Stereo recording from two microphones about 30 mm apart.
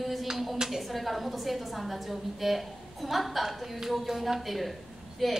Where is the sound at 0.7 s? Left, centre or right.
Centre.